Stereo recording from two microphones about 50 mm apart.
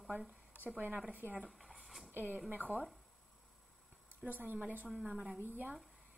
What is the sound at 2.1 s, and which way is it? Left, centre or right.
Speech, right.